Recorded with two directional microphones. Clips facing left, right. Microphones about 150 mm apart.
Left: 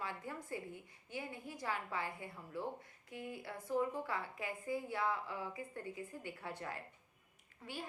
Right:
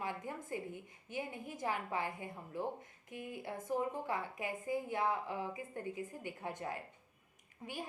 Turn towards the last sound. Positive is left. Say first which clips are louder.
# right 2 dB
turn(degrees=-20)  # may be behind; listen again after turning